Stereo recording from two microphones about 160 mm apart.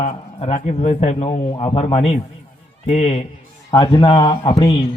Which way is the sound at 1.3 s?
30° left (ahead or behind).